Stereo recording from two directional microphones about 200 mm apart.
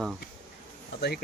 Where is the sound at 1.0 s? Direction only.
55° left (ahead or behind).